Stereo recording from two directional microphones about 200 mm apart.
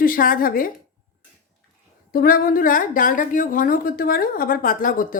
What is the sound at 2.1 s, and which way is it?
A woman's voice, 45° left (ahead or behind).